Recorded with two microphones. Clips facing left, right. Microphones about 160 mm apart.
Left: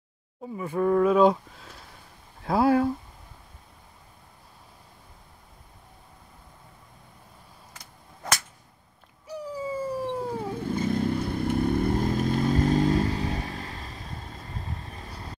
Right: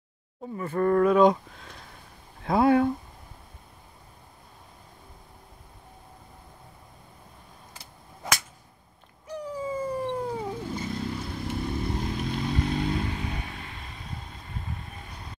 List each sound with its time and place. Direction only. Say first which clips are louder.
0.6 s speech: even; 5° left (ahead or behind)
9.3 s dog: even; 10° left (ahead or behind)
10.7 s vehicle: left 6 dB; 50° left (ahead or behind); by 15.3 s 35° left (ahead or behind)